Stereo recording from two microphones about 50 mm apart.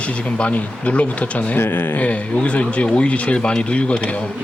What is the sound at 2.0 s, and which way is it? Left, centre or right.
Speech, left.